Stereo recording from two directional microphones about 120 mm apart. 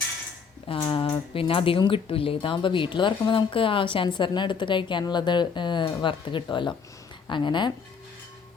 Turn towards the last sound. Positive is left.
turn(degrees=40)  # may be behind; listen again after turning